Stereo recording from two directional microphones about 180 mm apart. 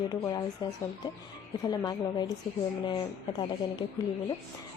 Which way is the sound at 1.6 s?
20° left (ahead or behind).